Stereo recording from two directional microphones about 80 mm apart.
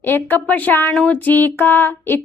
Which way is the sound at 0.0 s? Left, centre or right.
Left.